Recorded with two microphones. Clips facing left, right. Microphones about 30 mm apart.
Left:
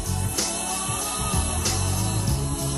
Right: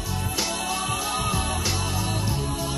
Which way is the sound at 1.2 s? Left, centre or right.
Centre.